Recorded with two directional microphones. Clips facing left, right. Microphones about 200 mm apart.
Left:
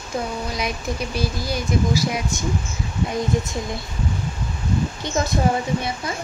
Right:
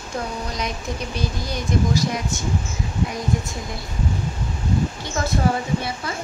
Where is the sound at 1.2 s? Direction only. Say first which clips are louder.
Left 3 dB; 5° left (ahead or behind).